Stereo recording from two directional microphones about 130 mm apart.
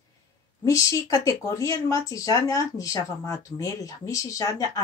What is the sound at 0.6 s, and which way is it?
Speech, 25° left (ahead or behind).